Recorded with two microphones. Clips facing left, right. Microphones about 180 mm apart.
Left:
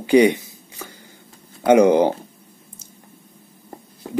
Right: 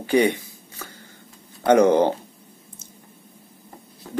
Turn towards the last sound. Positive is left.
turn(degrees=50)  # may be behind; listen again after turning